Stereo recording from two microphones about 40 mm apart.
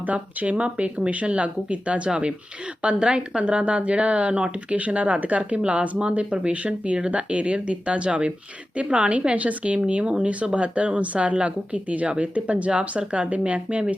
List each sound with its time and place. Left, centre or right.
0.0 s a woman's voice: right